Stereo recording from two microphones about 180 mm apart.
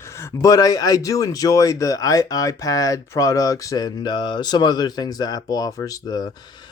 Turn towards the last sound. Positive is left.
turn(degrees=25)  # may be behind; listen again after turning